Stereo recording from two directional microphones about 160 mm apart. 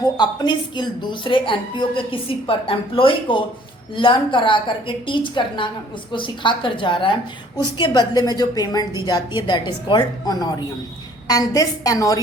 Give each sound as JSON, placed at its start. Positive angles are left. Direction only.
{"t": 0.2, "sound": "a woman's voice", "side_deg": 25}